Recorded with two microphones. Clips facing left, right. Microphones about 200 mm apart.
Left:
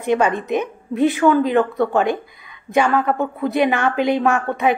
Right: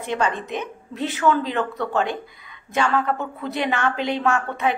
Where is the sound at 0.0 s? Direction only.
15° left (ahead or behind).